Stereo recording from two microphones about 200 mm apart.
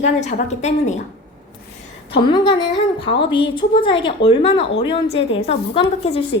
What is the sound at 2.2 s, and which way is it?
A woman's voice, 20° left (ahead or behind).